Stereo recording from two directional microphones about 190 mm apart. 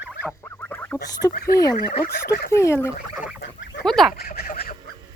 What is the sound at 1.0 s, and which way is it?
Speech, 20° left (ahead or behind).